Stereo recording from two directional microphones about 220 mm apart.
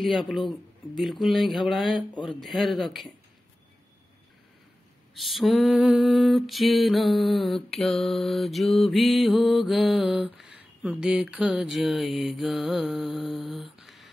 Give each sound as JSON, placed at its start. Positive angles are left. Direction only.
{"t": 0.0, "sound": "lullaby", "side_deg": 0}
{"t": 2.0, "sound": "speech", "side_deg": 20}
{"t": 2.4, "sound": "lullaby", "side_deg": 0}
{"t": 5.1, "sound": "lullaby", "side_deg": 0}